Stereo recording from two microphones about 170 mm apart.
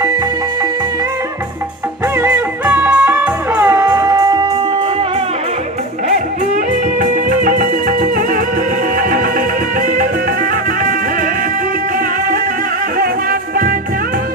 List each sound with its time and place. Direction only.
2.1 s music: 10° right (ahead or behind)
7.0 s music: 50° right (ahead or behind)